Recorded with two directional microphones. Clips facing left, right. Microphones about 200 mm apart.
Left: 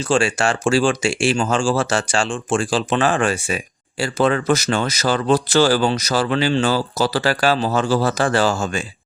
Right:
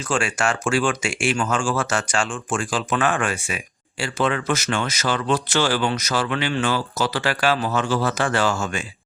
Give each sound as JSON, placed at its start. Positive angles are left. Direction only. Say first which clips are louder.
{"t": 0.0, "sound": "speech", "louder": "left 5 dB", "side_deg": 30}